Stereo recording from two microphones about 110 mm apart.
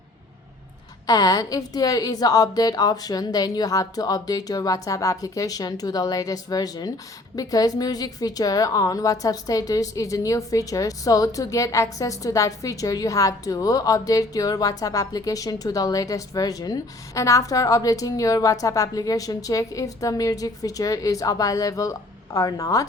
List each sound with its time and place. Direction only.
1.0 s a woman's voice: 35° left (ahead or behind)